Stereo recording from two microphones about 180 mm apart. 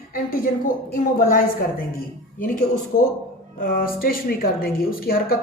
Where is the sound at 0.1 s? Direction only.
55° left (ahead or behind).